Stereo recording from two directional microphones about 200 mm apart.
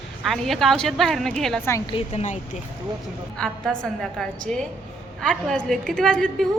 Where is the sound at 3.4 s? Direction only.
5° left (ahead or behind).